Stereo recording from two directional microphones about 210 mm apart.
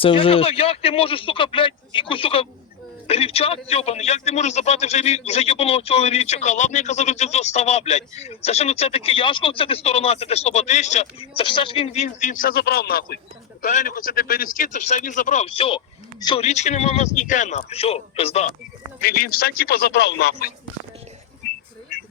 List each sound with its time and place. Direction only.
0.0 s a man's voice: 25° left (ahead or behind)
19.0 s a man's voice: 45° left (ahead or behind)